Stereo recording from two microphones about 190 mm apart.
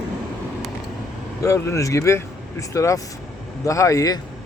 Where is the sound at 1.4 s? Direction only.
15° left (ahead or behind).